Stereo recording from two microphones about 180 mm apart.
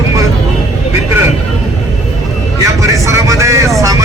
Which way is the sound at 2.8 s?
15° right (ahead or behind).